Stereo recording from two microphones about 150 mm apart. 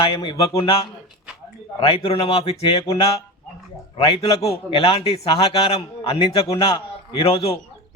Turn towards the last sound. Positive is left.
turn(degrees=40)  # may be behind; listen again after turning